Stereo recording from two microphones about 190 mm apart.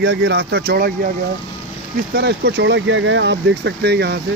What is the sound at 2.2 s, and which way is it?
Speech, 65° right (ahead or behind).